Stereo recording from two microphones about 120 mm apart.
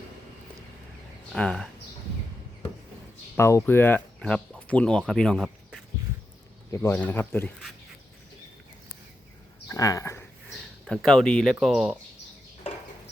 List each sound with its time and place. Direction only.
1.3 s speech: 5° left (ahead or behind)
3.3 s speech: 20° left (ahead or behind); by 5.8 s centre (ahead or behind)
6.7 s speech: 25° left (ahead or behind)
9.6 s speech: 25° left (ahead or behind)
10.5 s speech: 5° left (ahead or behind)